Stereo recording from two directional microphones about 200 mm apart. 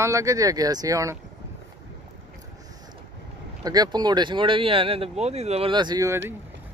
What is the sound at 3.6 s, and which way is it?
Speech, 20° right (ahead or behind).